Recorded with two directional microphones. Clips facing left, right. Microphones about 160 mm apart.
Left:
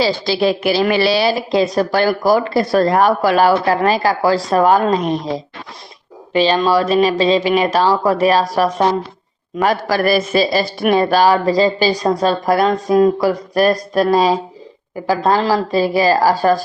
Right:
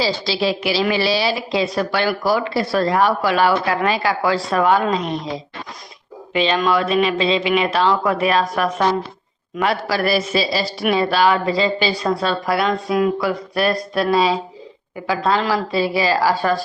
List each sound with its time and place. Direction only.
0.0 s a woman's voice: 50° left (ahead or behind)
6.3 s speech: 35° left (ahead or behind)
9.6 s a woman's voice: 45° left (ahead or behind)